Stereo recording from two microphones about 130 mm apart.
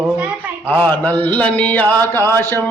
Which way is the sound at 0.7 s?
15° left (ahead or behind).